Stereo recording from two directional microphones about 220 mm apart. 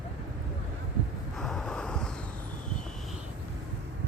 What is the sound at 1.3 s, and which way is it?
Wind noise, centre (ahead or behind).